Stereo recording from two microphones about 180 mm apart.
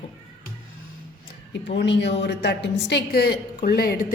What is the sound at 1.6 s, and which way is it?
A woman's voice, 75° left (ahead or behind).